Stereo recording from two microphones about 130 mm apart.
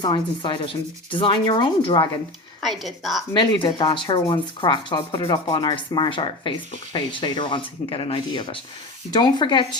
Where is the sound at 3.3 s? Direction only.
35° left (ahead or behind).